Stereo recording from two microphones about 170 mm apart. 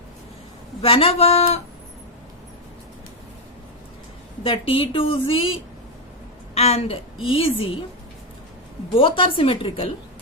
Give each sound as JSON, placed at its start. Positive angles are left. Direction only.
{"t": 0.8, "sound": "a woman's voice", "side_deg": 35}
{"t": 4.4, "sound": "a woman's voice", "side_deg": 30}
{"t": 9.0, "sound": "a woman's voice", "side_deg": 30}